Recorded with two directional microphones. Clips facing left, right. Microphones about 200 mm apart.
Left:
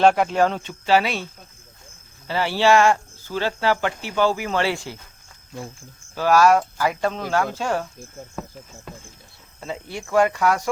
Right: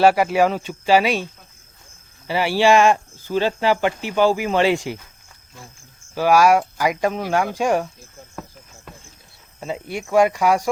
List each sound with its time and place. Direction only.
0.0 s speech: 5° right (ahead or behind)
6.1 s speech: 10° right (ahead or behind)
9.6 s speech: 15° right (ahead or behind)